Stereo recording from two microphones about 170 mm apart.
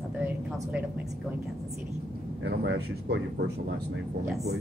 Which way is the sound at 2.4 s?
90° right.